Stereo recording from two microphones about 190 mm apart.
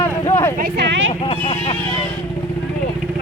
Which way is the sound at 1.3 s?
30° left (ahead or behind).